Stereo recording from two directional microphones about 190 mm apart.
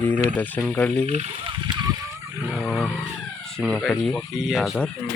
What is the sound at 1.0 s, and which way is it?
Speech, 35° right (ahead or behind).